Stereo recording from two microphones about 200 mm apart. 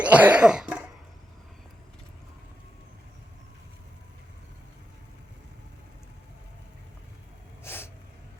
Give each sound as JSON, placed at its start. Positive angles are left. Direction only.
{"t": 0.0, "sound": "cough", "side_deg": -5}
{"t": 7.6, "sound": "snort", "side_deg": 10}